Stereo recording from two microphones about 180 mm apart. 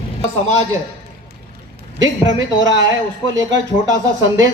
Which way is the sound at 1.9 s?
90° right.